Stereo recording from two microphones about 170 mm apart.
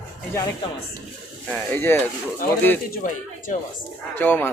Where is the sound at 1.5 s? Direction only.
15° left (ahead or behind).